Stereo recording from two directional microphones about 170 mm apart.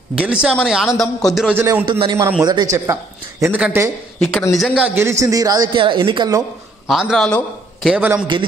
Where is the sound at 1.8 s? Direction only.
30° right (ahead or behind).